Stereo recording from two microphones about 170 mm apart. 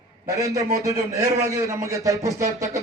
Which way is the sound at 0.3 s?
20° right (ahead or behind).